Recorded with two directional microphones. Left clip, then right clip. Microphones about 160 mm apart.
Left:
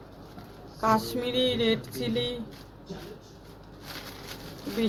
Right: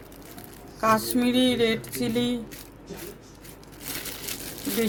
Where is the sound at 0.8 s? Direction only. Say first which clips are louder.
Right 3 dB; 75° right (ahead or behind).